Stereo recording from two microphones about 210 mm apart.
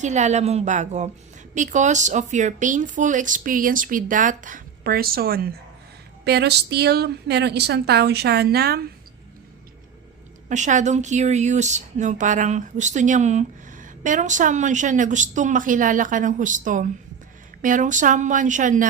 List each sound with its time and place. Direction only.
0.0 s a woman's voice: 35° right (ahead or behind)
10.5 s a woman's voice: 35° right (ahead or behind)